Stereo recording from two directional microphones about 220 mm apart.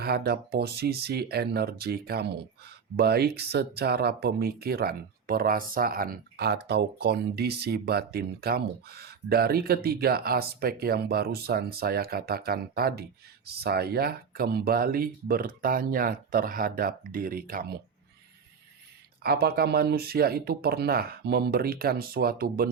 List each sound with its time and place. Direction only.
0.0 s speech: 45° right (ahead or behind)
19.2 s speech: 45° right (ahead or behind)